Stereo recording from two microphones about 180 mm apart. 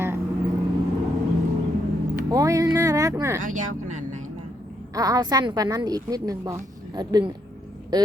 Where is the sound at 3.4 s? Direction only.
50° right (ahead or behind).